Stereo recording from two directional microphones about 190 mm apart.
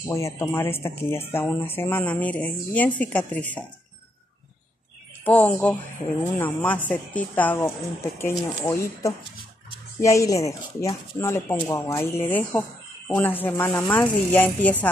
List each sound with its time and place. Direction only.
0.1 s speech: 15° left (ahead or behind)
5.2 s speech: 10° left (ahead or behind)